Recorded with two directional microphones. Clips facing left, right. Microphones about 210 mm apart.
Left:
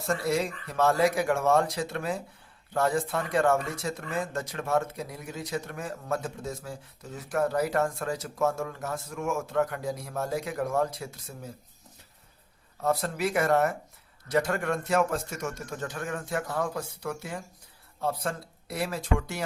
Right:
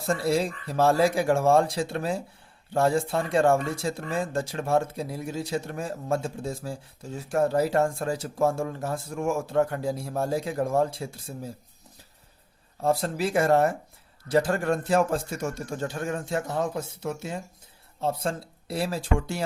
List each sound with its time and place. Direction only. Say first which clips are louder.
0.0 s speech: right 3 dB; 30° right (ahead or behind)
12.8 s speech: right 2 dB; 30° right (ahead or behind)